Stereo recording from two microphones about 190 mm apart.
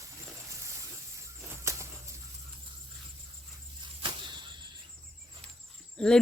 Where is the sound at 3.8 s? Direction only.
25° right (ahead or behind).